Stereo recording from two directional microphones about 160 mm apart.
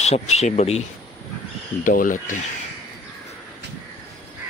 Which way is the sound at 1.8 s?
55° left (ahead or behind).